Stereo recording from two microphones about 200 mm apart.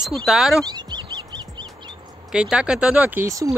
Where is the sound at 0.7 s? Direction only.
20° right (ahead or behind).